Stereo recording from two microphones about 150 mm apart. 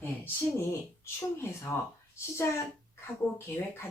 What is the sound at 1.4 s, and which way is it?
A woman's voice, 15° left (ahead or behind).